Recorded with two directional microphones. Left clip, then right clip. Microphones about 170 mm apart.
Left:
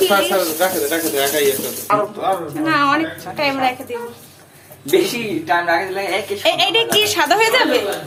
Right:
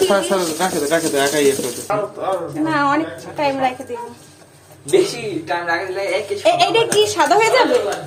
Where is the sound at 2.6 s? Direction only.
20° right (ahead or behind).